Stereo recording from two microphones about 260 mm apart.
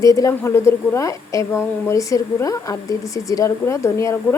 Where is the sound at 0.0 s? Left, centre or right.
Centre.